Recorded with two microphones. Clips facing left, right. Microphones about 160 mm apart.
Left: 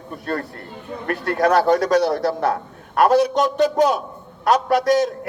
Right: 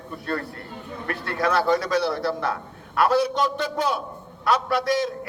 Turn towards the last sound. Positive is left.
turn(degrees=45)  # may be behind; listen again after turning